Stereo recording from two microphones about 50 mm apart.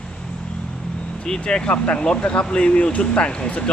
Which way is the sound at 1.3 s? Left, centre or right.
Centre.